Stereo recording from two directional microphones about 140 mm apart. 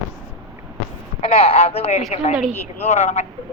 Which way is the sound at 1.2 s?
45° left (ahead or behind).